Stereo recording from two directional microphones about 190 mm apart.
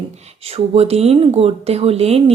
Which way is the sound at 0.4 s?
30° right (ahead or behind).